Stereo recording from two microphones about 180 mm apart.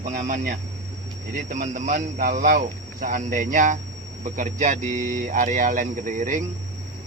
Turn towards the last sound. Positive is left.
turn(degrees=-45)  # may be behind; listen again after turning